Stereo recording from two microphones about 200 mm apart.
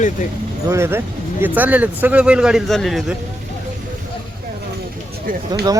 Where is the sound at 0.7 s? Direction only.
15° right (ahead or behind).